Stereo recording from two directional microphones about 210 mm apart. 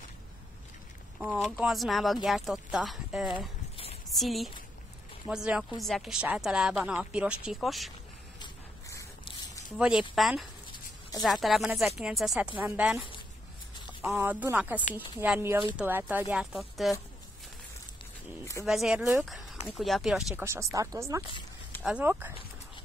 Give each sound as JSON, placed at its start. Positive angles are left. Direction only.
{"t": 1.2, "sound": "a woman's voice", "side_deg": -5}
{"t": 3.3, "sound": "a sound", "side_deg": 25}
{"t": 4.1, "sound": "a woman's voice", "side_deg": 0}
{"t": 8.4, "sound": "a sound", "side_deg": 20}
{"t": 9.8, "sound": "a woman's voice", "side_deg": -5}
{"t": 14.0, "sound": "speech", "side_deg": -10}
{"t": 18.4, "sound": "speech", "side_deg": 15}
{"t": 18.7, "sound": "a woman's voice", "side_deg": 0}
{"t": 20.4, "sound": "speech", "side_deg": -15}